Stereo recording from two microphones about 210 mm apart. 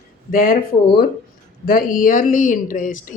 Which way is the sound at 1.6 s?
40° left (ahead or behind).